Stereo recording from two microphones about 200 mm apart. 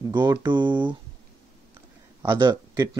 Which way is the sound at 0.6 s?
10° right (ahead or behind).